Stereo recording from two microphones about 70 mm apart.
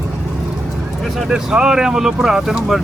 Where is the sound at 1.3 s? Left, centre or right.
Centre.